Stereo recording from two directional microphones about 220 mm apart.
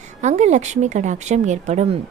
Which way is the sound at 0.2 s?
30° right (ahead or behind).